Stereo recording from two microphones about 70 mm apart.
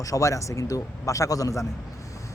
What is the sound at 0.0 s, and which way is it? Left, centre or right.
A man's voice, left.